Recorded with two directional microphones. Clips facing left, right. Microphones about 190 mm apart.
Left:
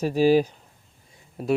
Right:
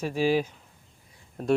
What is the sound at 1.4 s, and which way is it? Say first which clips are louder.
Speech: even; 5° left (ahead or behind).